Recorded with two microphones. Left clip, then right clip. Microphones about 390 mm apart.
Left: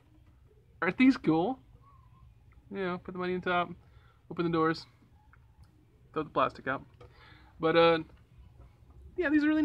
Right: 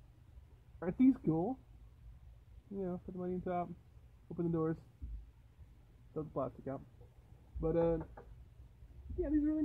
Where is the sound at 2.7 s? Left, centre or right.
Centre.